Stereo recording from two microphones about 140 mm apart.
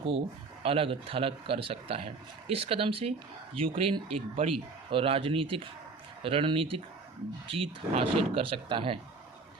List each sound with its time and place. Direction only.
0.6 s speech: 40° right (ahead or behind)